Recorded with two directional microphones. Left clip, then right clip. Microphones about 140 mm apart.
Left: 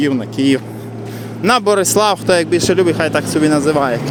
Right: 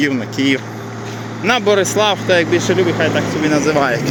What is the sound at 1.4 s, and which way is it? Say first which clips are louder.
Speech: left 1 dB; 45° left (ahead or behind).